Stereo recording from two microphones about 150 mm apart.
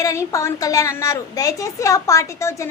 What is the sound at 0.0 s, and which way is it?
A woman's voice, 20° left (ahead or behind).